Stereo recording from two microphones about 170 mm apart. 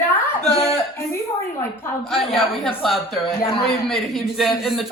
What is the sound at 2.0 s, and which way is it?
A man's voice, centre (ahead or behind).